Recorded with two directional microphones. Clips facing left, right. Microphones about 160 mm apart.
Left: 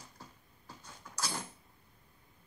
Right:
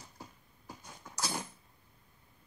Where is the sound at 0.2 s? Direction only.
10° right (ahead or behind).